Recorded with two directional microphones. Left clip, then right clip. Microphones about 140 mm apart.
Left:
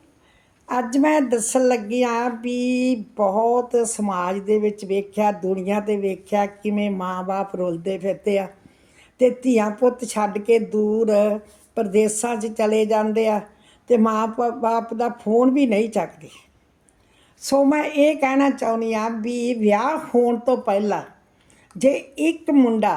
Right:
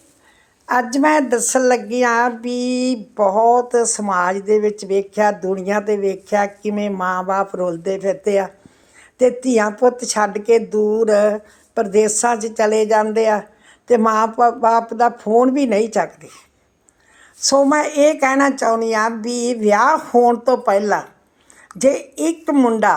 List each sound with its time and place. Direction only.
0.7 s a woman's voice: 10° left (ahead or behind)
17.4 s a woman's voice: 15° left (ahead or behind)